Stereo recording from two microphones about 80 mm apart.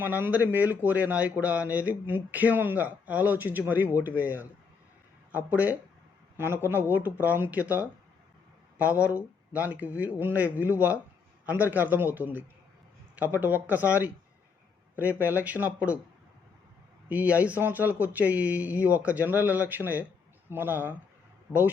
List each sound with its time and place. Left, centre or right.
0.0 s speech: right
9.0 s speech: centre
15.4 s speech: centre
17.1 s speech: centre
21.5 s speech: centre